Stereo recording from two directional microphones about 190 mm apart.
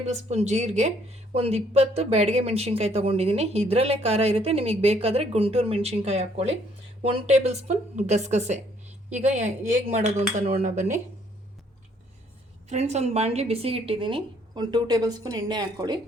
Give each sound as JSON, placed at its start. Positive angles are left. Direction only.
{"t": 0.0, "sound": "speech", "side_deg": -35}
{"t": 12.6, "sound": "a woman's voice", "side_deg": -35}